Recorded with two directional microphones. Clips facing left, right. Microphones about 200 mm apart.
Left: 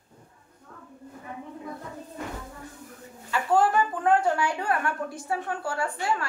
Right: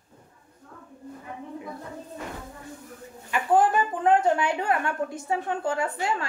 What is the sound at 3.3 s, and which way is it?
A woman's voice, 20° right (ahead or behind).